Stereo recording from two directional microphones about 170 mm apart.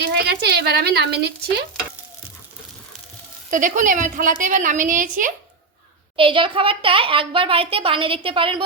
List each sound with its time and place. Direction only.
0.2 s a woman's voice: 80° right
3.5 s a woman's voice: 50° right (ahead or behind)
6.1 s a child's voice: 30° right (ahead or behind)